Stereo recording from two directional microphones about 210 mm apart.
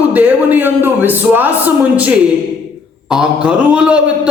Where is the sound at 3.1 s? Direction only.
5° right (ahead or behind).